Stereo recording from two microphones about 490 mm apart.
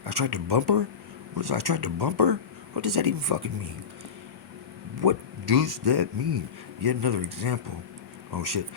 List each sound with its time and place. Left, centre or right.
0.0 s speech: right
4.9 s speech: right